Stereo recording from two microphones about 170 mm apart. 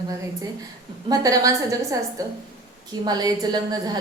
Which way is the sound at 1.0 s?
20° right (ahead or behind).